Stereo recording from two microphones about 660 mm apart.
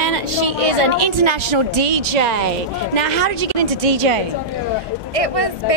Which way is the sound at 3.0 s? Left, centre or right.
Right.